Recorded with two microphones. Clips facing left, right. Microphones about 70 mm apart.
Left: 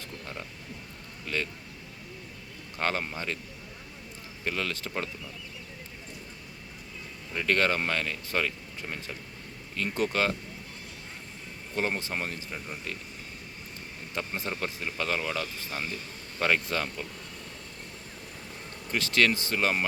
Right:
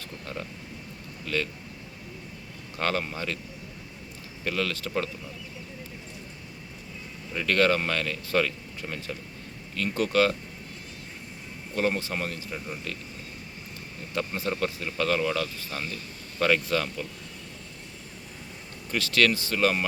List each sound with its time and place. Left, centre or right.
1.3 s speech: centre
2.7 s speech: centre
4.4 s speech: centre
7.4 s speech: left
11.7 s speech: centre
12.5 s speech: centre
14.2 s speech: left
18.9 s speech: left
19.5 s speech: centre